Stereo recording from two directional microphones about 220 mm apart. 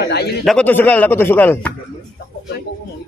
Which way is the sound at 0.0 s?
50° left (ahead or behind).